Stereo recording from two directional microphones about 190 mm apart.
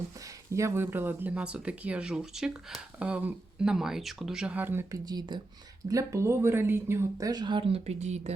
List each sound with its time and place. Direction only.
0.5 s speech: 15° right (ahead or behind); by 8.3 s 35° right (ahead or behind)